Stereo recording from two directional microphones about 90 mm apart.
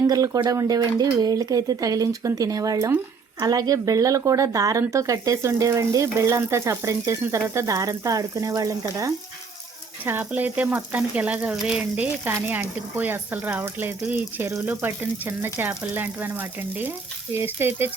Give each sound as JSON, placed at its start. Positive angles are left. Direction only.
{"t": 0.1, "sound": "speech", "side_deg": -50}
{"t": 10.1, "sound": "frying", "side_deg": -20}
{"t": 11.5, "sound": "a sound", "side_deg": -10}
{"t": 12.2, "sound": "frying", "side_deg": -20}